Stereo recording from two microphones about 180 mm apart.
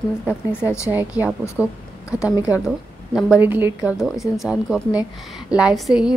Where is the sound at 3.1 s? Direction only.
Centre (ahead or behind).